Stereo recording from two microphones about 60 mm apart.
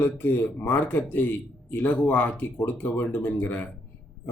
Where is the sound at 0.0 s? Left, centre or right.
Left.